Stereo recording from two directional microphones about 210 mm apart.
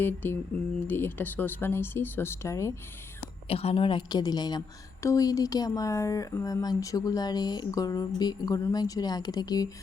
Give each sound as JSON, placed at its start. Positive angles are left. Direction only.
{"t": 0.0, "sound": "speech", "side_deg": 10}
{"t": 3.5, "sound": "a woman's voice", "side_deg": 30}